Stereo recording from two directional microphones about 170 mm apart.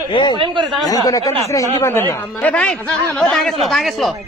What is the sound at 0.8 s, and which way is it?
Speech, 20° left (ahead or behind).